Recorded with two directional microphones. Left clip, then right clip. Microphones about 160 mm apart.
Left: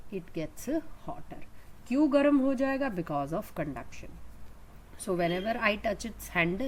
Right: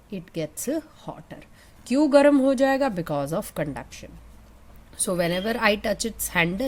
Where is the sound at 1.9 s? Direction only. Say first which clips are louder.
Right 8 dB; 60° right (ahead or behind).